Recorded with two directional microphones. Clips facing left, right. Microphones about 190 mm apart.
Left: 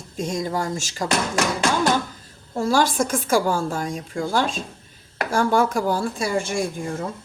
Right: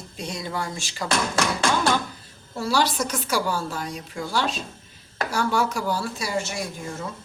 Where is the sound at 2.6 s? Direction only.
50° left (ahead or behind).